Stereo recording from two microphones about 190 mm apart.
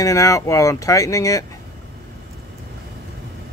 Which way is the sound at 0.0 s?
15° left (ahead or behind).